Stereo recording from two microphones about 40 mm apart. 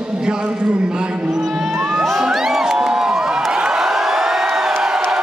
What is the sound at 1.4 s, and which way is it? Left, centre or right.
Music, centre.